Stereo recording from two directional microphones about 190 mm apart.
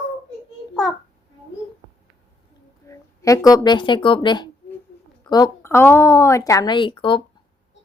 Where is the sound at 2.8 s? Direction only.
15° left (ahead or behind).